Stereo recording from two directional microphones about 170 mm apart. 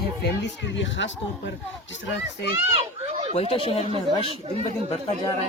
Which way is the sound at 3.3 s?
35° left (ahead or behind).